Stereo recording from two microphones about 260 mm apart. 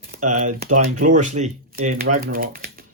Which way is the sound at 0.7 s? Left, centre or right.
Right.